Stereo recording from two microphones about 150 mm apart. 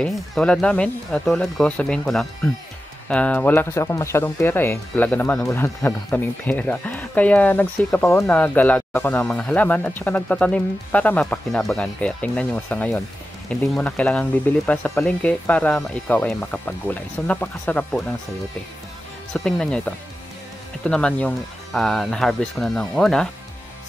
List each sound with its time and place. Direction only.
0.0 s speech: 5° left (ahead or behind)
19.3 s speech: 5° left (ahead or behind)